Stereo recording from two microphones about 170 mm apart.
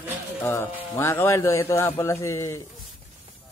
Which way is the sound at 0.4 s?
15° left (ahead or behind).